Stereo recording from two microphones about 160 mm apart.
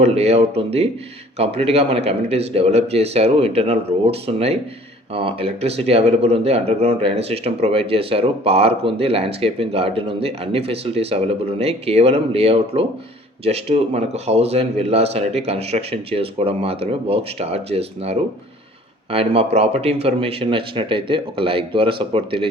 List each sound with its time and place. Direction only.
0.0 s speech: 40° right (ahead or behind)